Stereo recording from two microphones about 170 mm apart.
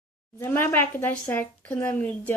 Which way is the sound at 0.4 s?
15° left (ahead or behind).